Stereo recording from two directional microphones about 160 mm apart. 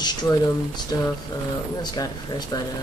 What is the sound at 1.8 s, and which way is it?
Speech, 25° left (ahead or behind).